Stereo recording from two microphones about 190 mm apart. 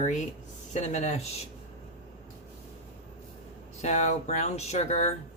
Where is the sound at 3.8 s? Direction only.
35° left (ahead or behind).